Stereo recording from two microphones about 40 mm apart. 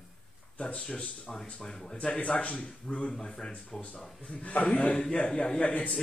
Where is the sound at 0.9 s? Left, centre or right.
Left.